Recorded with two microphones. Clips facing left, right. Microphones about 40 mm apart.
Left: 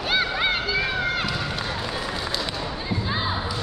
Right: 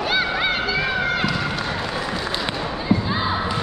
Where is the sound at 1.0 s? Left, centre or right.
Centre.